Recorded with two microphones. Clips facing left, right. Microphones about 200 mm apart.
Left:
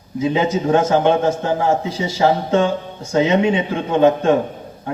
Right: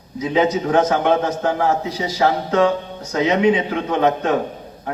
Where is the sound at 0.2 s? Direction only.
30° left (ahead or behind).